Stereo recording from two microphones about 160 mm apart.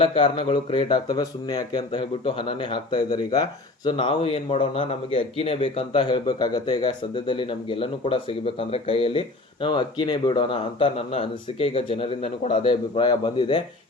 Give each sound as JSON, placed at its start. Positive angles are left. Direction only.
{"t": 0.0, "sound": "a man's voice", "side_deg": 35}